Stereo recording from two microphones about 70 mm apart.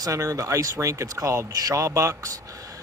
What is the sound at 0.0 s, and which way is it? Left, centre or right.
Speech, right.